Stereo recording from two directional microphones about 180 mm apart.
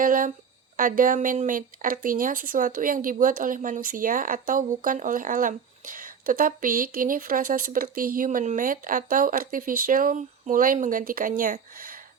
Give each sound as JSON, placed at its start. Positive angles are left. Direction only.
{"t": 0.0, "sound": "speech", "side_deg": -50}